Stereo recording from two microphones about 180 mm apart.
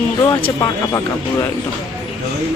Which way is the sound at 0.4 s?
20° left (ahead or behind).